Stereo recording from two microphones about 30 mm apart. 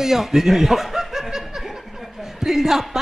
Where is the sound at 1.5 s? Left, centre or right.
Centre.